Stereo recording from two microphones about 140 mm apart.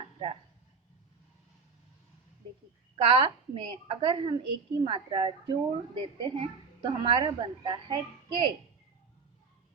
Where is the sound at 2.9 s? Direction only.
40° right (ahead or behind).